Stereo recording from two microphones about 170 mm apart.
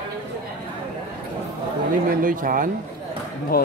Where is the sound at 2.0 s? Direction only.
55° right (ahead or behind).